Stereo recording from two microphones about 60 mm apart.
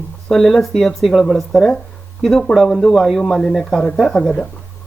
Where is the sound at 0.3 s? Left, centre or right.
Centre.